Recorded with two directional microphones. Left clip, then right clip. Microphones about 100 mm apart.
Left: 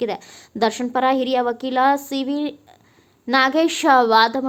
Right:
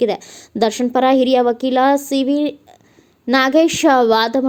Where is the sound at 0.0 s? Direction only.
35° right (ahead or behind).